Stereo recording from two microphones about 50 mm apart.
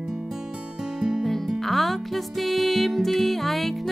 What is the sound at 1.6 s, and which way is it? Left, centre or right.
Music, centre.